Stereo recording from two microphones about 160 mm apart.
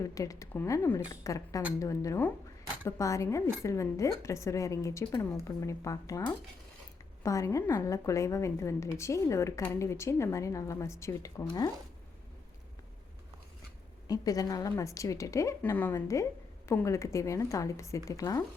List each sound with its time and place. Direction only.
0.0 s a woman's voice: 20° left (ahead or behind)
14.1 s a woman's voice: 20° left (ahead or behind)